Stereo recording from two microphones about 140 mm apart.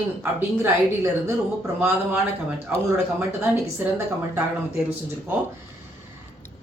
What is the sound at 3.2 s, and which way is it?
Speech, 15° right (ahead or behind).